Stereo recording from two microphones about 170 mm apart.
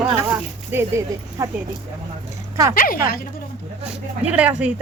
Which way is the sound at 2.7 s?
55° left (ahead or behind).